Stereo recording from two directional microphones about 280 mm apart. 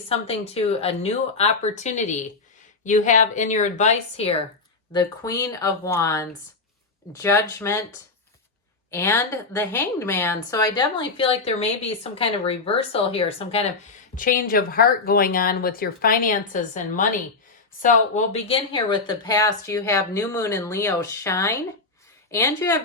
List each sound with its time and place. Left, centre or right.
0.1 s a woman's voice: left
8.9 s a woman's voice: centre